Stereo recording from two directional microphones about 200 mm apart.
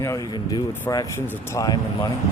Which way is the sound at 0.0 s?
15° left (ahead or behind).